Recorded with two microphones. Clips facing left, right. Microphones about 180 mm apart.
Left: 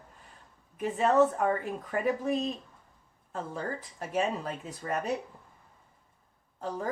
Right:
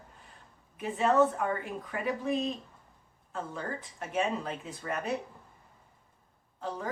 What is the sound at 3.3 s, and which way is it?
Speech, 35° left (ahead or behind).